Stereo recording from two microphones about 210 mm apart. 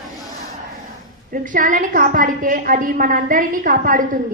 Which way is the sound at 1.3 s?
40° right (ahead or behind).